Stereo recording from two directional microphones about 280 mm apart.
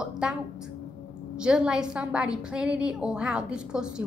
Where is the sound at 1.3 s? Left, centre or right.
Centre.